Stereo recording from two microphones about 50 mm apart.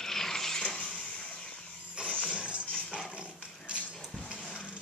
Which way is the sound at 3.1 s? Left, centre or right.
Right.